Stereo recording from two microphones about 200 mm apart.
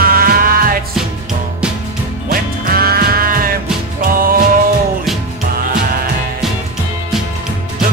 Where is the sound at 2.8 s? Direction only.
50° right (ahead or behind).